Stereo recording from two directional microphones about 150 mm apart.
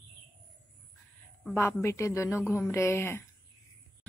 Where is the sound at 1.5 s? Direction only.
15° left (ahead or behind).